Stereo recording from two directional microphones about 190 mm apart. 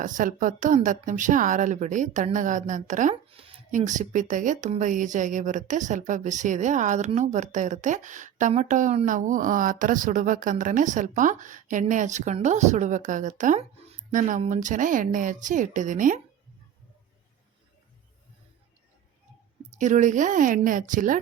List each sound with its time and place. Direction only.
0.0 s a woman's voice: 45° right (ahead or behind)
3.2 s a sound: 30° right (ahead or behind)
3.7 s a woman's voice: 40° right (ahead or behind)
19.8 s speech: 40° right (ahead or behind)